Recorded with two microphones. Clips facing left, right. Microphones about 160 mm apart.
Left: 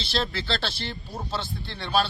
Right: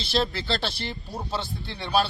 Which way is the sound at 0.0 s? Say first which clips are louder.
Right 3 dB; centre (ahead or behind).